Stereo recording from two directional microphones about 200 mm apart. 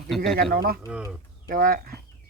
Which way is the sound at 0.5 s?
45° right (ahead or behind).